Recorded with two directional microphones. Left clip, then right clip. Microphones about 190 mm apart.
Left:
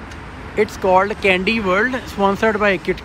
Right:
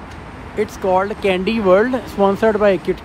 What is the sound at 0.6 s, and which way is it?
Speech, 10° right (ahead or behind).